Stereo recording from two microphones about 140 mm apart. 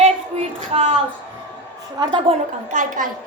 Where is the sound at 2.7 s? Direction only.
60° right (ahead or behind).